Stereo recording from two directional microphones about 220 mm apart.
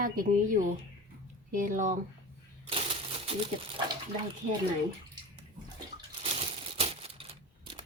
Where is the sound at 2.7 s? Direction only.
25° right (ahead or behind).